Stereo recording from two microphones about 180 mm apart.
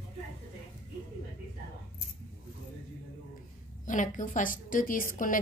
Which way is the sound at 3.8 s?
45° left (ahead or behind).